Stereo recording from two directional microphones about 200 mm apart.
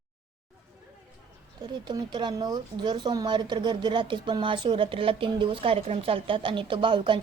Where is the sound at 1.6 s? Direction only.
20° right (ahead or behind).